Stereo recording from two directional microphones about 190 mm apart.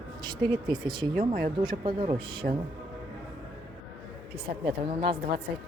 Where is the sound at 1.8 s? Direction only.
25° right (ahead or behind).